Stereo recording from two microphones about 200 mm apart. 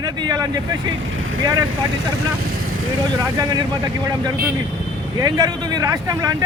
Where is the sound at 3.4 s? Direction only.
20° right (ahead or behind).